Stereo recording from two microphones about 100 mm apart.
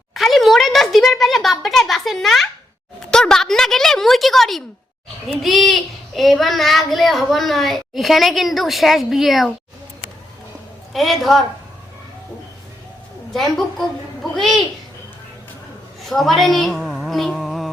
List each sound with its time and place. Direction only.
0.1 s a sound: centre (ahead or behind)
3.1 s speech: 5° left (ahead or behind)
10.9 s speech: centre (ahead or behind)
13.3 s speech: 5° left (ahead or behind)
16.0 s a woman's voice: centre (ahead or behind)